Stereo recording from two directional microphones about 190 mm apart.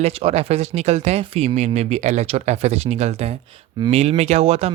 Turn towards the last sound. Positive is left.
turn(degrees=-30)  # may be behind; listen again after turning